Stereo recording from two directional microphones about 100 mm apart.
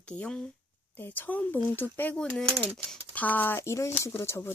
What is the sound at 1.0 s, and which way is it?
Speech, 15° left (ahead or behind).